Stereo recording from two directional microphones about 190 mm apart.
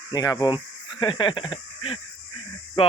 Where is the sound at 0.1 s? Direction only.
20° left (ahead or behind).